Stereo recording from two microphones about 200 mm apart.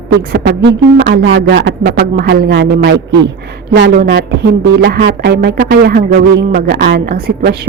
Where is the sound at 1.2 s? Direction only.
70° right (ahead or behind).